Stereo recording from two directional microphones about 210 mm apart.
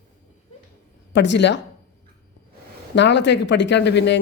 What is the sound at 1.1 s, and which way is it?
Speech, 55° left (ahead or behind).